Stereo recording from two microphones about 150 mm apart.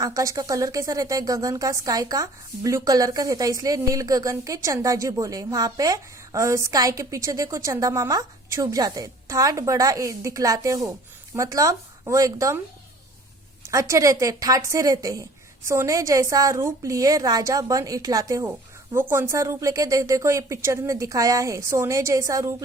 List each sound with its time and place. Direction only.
0.0 s speech: 25° right (ahead or behind)
13.7 s speech: 20° right (ahead or behind)